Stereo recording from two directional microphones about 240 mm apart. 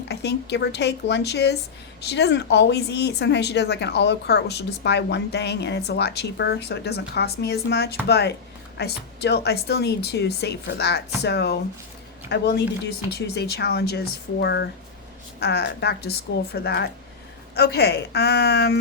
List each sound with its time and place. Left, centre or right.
0.1 s speech: left